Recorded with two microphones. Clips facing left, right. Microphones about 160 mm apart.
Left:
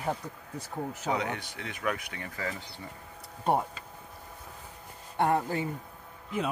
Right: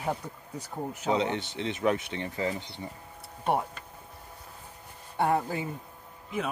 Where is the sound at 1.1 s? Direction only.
25° right (ahead or behind).